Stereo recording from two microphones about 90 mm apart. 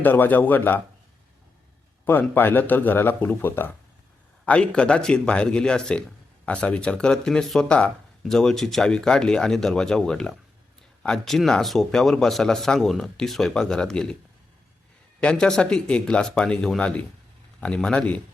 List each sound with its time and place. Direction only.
0.0 s speech: 20° left (ahead or behind)
2.0 s speech: 20° left (ahead or behind)
4.4 s a man's voice: 10° left (ahead or behind)
15.2 s speech: 10° left (ahead or behind)